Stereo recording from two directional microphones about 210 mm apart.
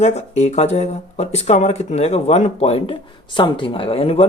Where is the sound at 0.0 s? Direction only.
30° left (ahead or behind).